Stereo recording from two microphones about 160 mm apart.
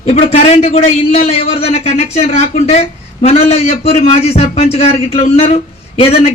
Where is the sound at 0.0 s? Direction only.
40° left (ahead or behind).